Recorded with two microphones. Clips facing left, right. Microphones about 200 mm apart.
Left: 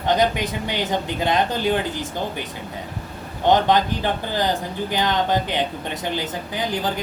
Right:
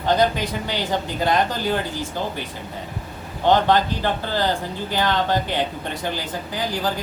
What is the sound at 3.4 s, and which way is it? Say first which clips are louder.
Speech: even; 20° left (ahead or behind).